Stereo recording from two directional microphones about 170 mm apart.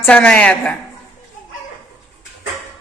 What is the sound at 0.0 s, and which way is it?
Speech, 5° left (ahead or behind).